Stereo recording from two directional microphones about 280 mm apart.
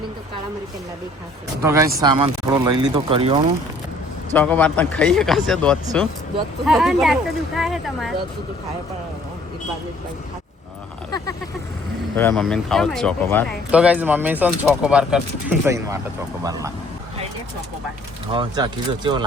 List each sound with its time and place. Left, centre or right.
1.6 s speech: centre
4.4 s speech: centre
12.1 s speech: centre
18.3 s speech: centre